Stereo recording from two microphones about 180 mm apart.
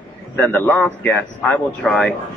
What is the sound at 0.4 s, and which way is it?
A man's voice, 10° left (ahead or behind).